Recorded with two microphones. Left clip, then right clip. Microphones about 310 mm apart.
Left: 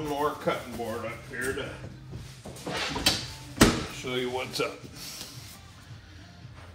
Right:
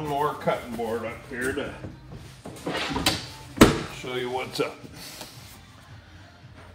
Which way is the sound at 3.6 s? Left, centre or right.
Right.